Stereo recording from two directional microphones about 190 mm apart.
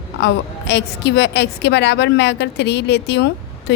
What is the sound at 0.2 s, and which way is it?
A woman's voice, 65° left (ahead or behind).